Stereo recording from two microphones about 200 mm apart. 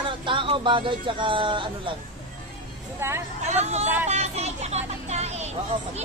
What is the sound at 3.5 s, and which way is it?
Speech, 35° right (ahead or behind).